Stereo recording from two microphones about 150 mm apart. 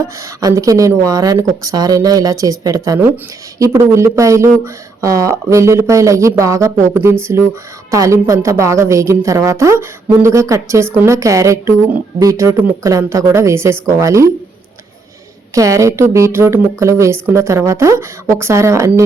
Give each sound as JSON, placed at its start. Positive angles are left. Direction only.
{"t": 0.2, "sound": "a woman's voice", "side_deg": -20}
{"t": 15.5, "sound": "a woman's voice", "side_deg": -20}